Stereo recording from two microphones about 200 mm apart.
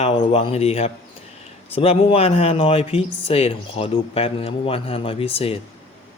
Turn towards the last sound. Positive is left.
turn(degrees=30)  # may be behind; listen again after turning